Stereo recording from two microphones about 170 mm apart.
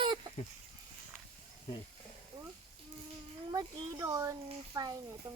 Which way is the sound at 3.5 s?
25° right (ahead or behind).